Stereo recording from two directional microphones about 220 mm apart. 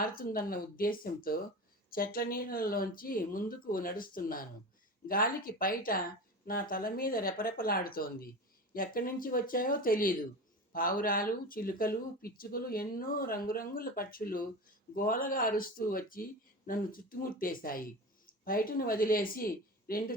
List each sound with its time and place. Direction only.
0.0 s speech: 40° left (ahead or behind)